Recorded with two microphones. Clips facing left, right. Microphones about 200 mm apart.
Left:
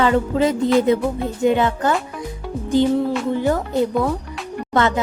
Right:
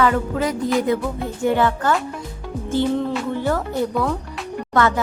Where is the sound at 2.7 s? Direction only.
10° left (ahead or behind).